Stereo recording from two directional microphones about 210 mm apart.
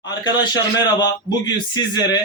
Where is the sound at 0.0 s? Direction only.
20° left (ahead or behind).